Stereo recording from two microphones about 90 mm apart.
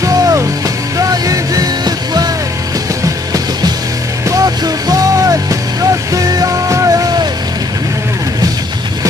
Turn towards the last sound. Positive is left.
turn(degrees=-40)  # may be behind; listen again after turning